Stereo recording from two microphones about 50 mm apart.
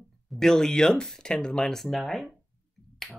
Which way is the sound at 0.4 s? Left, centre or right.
Centre.